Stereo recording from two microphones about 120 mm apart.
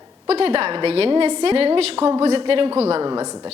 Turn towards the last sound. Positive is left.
turn(degrees=-30)  # may be behind; listen again after turning